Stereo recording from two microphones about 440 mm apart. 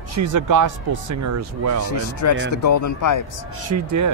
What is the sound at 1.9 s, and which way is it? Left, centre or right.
Speech, left.